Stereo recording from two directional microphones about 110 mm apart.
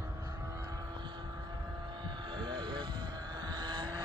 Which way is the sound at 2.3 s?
50° right (ahead or behind).